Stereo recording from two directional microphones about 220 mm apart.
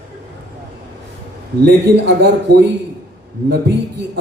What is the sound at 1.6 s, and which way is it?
A man's voice, 50° right (ahead or behind).